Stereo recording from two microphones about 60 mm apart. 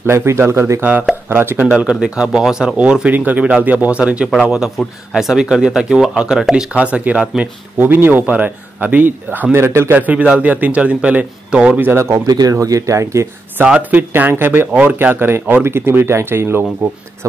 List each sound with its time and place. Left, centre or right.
0.0 s speech: right
1.9 s speech: centre
3.1 s speech: right
4.3 s speech: centre
6.5 s speech: right
7.8 s speech: right
9.7 s speech: right
9.9 s speech: right
12.4 s speech: right
13.7 s speech: right
14.7 s speech: right